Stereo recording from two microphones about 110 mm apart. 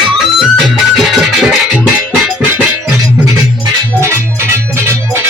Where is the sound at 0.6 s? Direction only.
Centre (ahead or behind).